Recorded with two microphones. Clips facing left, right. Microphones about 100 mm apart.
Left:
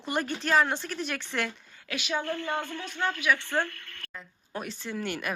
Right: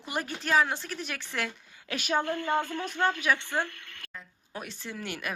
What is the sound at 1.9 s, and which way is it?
Speech, 45° right (ahead or behind).